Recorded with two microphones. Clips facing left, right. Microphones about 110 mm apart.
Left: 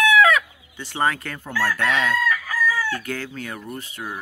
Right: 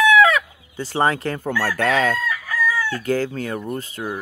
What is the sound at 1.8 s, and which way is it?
Chicken, 40° right (ahead or behind).